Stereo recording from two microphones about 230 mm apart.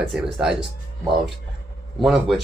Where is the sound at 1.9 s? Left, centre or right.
Centre.